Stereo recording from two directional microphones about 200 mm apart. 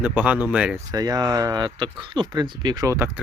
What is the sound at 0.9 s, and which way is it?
Speech, 20° right (ahead or behind).